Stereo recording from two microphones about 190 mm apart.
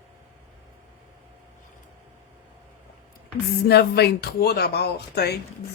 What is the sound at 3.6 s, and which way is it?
Speech, 60° left (ahead or behind).